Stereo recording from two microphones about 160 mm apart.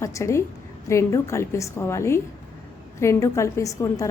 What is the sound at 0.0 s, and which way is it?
A woman's voice, 20° left (ahead or behind).